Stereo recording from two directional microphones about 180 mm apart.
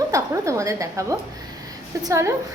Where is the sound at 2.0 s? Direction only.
15° right (ahead or behind).